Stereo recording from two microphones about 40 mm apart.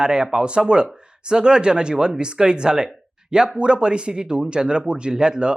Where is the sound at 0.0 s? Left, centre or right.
Right.